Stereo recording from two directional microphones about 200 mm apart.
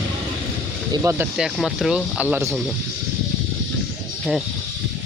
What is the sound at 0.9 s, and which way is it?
Speech, 15° right (ahead or behind).